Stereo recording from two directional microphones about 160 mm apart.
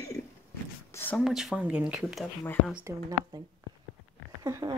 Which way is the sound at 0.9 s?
10° left (ahead or behind).